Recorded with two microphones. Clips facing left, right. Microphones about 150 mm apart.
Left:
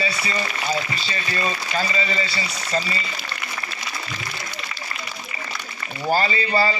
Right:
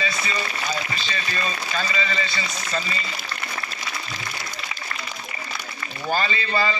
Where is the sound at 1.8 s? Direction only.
35° left (ahead or behind).